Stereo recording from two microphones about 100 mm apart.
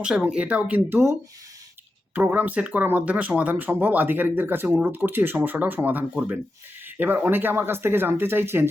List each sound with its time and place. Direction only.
0.0 s speech: 10° right (ahead or behind); by 1.1 s 25° right (ahead or behind)
2.1 s speech: 15° right (ahead or behind)